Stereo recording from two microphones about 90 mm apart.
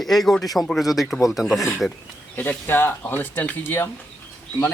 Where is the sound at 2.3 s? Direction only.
20° left (ahead or behind).